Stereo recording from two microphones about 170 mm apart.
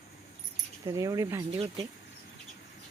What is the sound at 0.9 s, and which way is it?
Speech, 20° right (ahead or behind).